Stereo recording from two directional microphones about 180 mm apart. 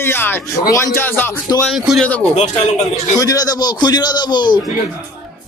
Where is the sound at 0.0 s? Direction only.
10° left (ahead or behind).